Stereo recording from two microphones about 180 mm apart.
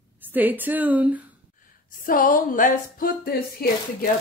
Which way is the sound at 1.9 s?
50° left (ahead or behind).